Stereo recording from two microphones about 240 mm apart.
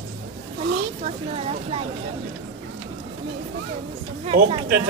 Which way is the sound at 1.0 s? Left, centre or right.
Right.